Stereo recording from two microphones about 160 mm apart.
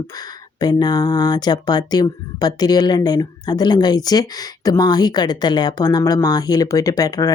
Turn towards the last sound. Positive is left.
turn(degrees=25)  # may be behind; listen again after turning